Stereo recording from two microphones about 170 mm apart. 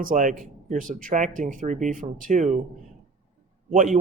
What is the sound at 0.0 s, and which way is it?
Speech, 55° right (ahead or behind).